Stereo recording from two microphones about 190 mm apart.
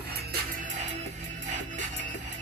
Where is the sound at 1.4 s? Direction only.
40° right (ahead or behind).